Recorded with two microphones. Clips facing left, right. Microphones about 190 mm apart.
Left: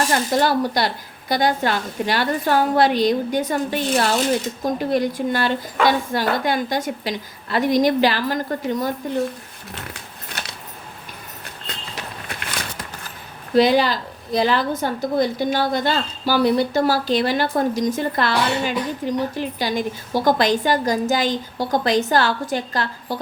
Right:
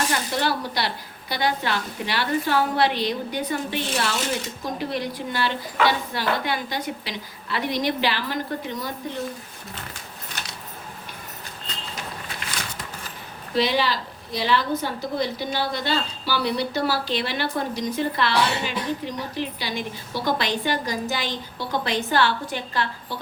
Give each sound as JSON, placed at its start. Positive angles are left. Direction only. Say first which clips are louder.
{"t": 0.1, "sound": "a woman's voice", "louder": "left 6 dB", "side_deg": 45}
{"t": 13.6, "sound": "a woman's voice", "louder": "left 7 dB", "side_deg": 45}